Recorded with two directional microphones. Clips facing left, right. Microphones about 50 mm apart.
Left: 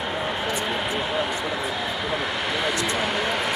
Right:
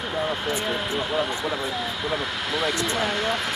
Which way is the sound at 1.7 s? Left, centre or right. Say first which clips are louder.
Left 1 dB; centre.